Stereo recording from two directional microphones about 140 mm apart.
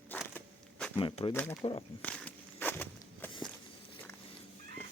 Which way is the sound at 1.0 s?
40° left (ahead or behind).